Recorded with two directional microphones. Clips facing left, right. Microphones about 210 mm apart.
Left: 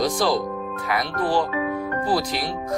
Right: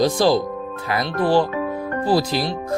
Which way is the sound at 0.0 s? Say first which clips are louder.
Right 5 dB; 25° right (ahead or behind).